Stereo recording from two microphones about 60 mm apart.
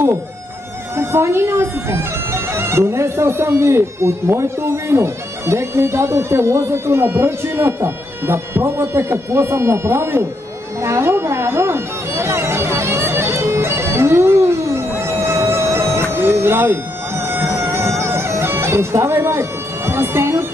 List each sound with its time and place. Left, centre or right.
0.9 s speech: right
10.8 s a sound: right
15.0 s music: right